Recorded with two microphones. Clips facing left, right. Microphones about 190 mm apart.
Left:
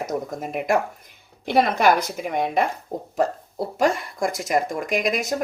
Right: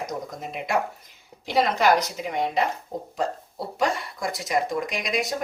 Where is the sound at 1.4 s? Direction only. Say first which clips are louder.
Left 3 dB; 55° left (ahead or behind).